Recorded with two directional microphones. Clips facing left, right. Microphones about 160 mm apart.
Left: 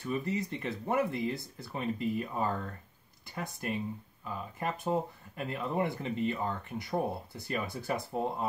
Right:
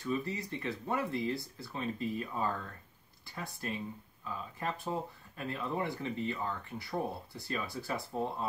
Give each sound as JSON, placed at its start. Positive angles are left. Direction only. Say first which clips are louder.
{"t": 0.1, "sound": "speech", "louder": "left 2 dB", "side_deg": 20}